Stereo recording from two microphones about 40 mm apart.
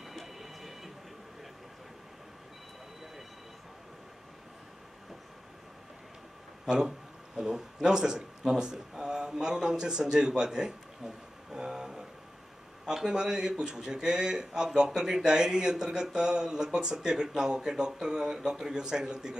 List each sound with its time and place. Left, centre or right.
0.1 s train: centre
7.3 s a man's voice: centre